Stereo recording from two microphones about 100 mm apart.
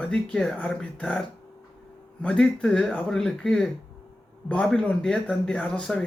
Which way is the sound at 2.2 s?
10° left (ahead or behind).